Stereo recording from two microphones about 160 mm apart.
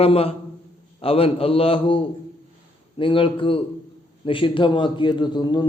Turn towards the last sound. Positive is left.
turn(degrees=25)  # may be behind; listen again after turning